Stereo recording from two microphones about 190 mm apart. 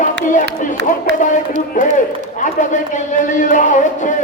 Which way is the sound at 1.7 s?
40° left (ahead or behind).